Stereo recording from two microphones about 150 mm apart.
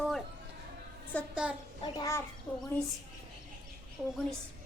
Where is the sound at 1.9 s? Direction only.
20° left (ahead or behind).